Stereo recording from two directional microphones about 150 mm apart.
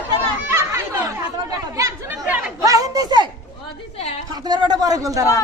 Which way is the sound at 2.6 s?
25° right (ahead or behind).